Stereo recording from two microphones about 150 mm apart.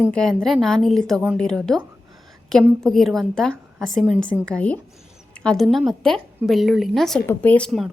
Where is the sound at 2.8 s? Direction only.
Centre (ahead or behind).